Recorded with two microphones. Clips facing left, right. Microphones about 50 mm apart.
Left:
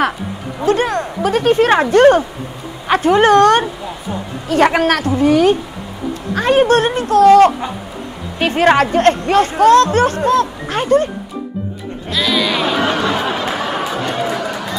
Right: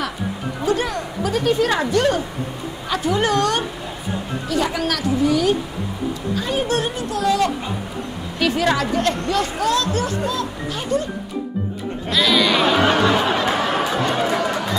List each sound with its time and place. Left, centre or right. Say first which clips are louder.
0.7 s speech: left 6 dB; left
6.3 s speech: left 11 dB; left
12.1 s music: even; centre